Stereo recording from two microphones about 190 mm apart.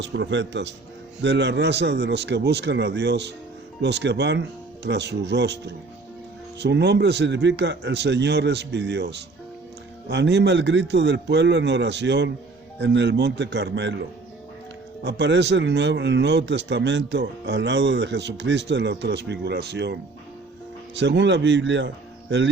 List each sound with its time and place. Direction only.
0.0 s a man's voice: 70° right (ahead or behind)
15.0 s speech: 65° right (ahead or behind)